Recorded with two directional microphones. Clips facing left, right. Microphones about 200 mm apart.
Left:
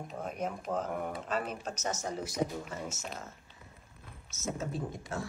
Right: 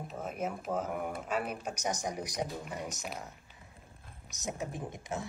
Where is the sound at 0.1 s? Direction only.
5° right (ahead or behind).